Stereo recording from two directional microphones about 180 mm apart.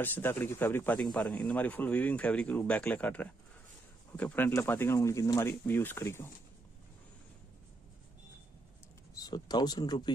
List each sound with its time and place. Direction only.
0.0 s speech: 10° left (ahead or behind)
9.1 s speech: 20° left (ahead or behind)